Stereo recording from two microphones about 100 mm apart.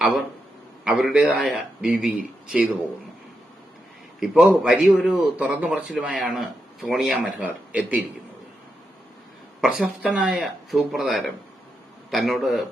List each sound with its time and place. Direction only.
0.9 s a man's voice: 5° right (ahead or behind)
4.2 s a man's voice: 5° right (ahead or behind)
5.5 s a man's voice: 15° right (ahead or behind)
6.1 s speech: centre (ahead or behind)
7.3 s a man's voice: 15° right (ahead or behind)
9.6 s speech: 5° right (ahead or behind)